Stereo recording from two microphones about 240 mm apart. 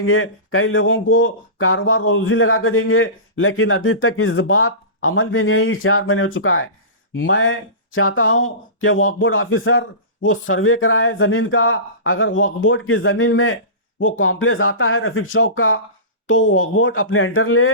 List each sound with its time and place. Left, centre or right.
0.0 s speech: left